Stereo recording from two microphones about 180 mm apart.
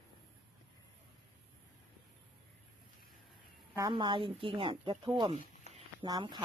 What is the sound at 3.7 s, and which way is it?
A woman's voice, 20° right (ahead or behind).